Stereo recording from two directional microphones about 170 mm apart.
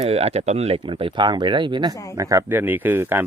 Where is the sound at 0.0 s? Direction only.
35° right (ahead or behind).